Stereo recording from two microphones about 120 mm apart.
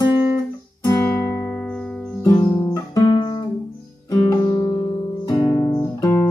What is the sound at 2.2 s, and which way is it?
Guitar, 25° left (ahead or behind).